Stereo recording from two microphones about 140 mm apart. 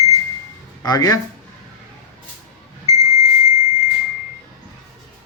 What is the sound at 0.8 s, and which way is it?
Speech, 25° left (ahead or behind).